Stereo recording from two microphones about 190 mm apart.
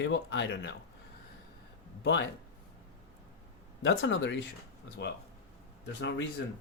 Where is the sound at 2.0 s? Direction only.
65° left (ahead or behind).